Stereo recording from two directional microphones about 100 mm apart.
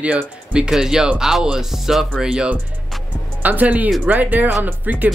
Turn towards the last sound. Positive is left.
turn(degrees=-15)  # may be behind; listen again after turning